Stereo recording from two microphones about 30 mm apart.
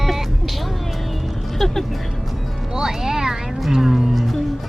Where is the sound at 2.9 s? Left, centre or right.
Centre.